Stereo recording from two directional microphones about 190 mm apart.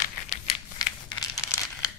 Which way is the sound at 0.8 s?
20° left (ahead or behind).